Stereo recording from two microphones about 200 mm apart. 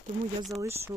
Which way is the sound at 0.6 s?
15° right (ahead or behind).